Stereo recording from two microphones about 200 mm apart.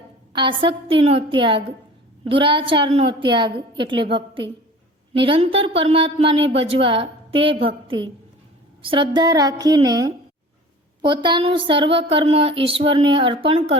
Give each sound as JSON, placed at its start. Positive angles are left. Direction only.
{"t": 0.3, "sound": "speech", "side_deg": -25}